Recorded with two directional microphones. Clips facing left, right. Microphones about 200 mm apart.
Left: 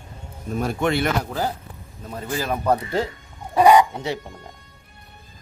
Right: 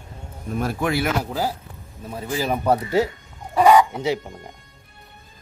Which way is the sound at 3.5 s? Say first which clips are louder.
Even; 15° left (ahead or behind).